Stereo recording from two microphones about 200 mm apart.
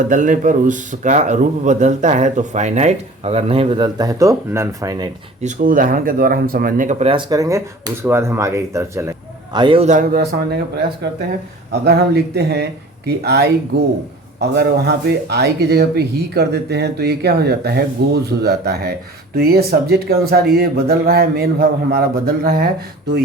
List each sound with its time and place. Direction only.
0.1 s speech: 40° right (ahead or behind); by 5.1 s 20° right (ahead or behind)
5.4 s speech: 40° right (ahead or behind)
7.1 s speech: 20° right (ahead or behind); by 22.7 s 50° right (ahead or behind)